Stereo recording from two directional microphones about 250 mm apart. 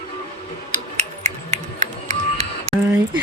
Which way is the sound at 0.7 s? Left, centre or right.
Right.